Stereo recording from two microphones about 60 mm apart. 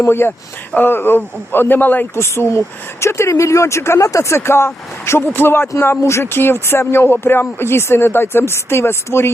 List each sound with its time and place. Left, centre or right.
0.0 s speech: left
2.1 s speech: left
5.8 s speech: left
6.2 s speech: left